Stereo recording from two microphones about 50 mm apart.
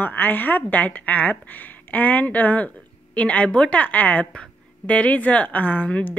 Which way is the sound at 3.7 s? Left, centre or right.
Left.